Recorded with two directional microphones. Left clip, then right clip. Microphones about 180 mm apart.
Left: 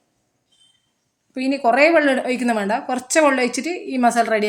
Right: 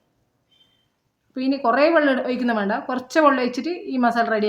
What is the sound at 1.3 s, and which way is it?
A woman's voice, 30° left (ahead or behind).